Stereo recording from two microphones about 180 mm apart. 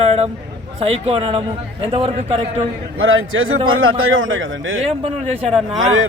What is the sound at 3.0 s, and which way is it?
A man's voice, 90° right.